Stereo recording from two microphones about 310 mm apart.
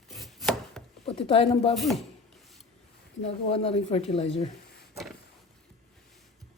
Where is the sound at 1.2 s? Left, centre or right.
Centre.